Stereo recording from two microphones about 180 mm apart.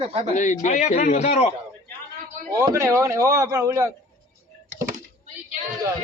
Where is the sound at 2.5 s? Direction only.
15° right (ahead or behind).